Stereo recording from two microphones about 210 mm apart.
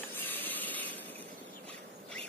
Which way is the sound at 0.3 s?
10° left (ahead or behind).